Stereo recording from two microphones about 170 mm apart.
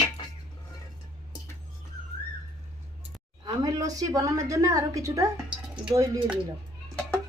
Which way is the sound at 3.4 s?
20° right (ahead or behind).